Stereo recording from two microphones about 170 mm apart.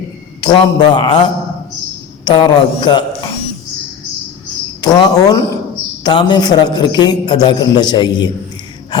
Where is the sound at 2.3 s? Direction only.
25° left (ahead or behind).